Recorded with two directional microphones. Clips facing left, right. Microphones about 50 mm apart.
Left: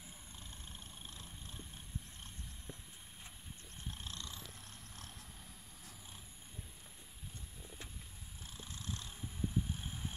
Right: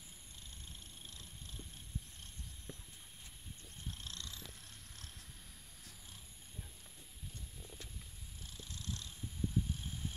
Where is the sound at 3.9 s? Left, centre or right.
Centre.